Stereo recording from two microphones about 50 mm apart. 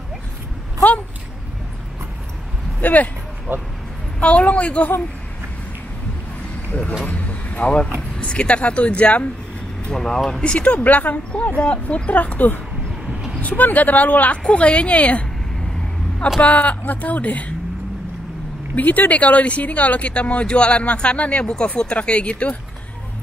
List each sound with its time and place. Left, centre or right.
2.8 s speech: left
3.5 s speech: right
4.2 s speech: left
6.7 s speech: left
7.1 s vehicle: left
8.2 s speech: left
9.8 s speech: centre
10.4 s speech: left
16.3 s speech: left
18.8 s speech: left